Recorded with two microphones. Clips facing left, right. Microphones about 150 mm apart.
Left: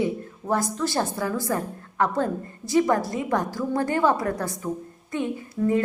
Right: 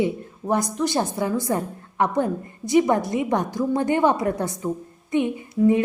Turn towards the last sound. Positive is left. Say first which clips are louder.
# right 4 dB
turn(degrees=-20)  # may be behind; listen again after turning